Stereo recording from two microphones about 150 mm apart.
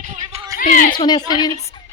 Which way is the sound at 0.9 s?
30° left (ahead or behind).